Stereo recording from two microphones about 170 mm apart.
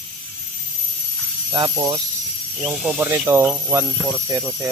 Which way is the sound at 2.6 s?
5° right (ahead or behind).